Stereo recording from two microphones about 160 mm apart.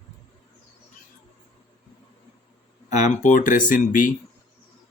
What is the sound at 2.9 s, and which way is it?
Speech, 45° left (ahead or behind).